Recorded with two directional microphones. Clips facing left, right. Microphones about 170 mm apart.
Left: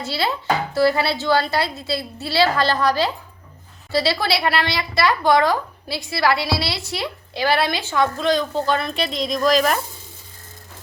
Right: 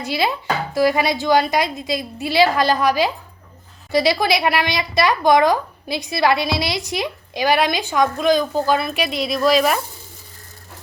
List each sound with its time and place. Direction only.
0.0 s speech: 15° right (ahead or behind)